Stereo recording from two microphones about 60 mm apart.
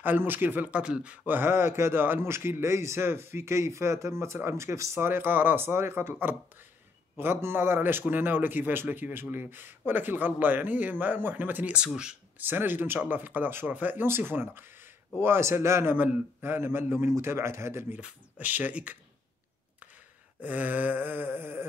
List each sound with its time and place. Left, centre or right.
0.0 s speech: right
1.3 s a man's voice: right
5.0 s speech: right
11.7 s speech: centre
12.4 s a man's voice: right
15.9 s a man's voice: right
18.0 s speech: right
20.4 s speech: right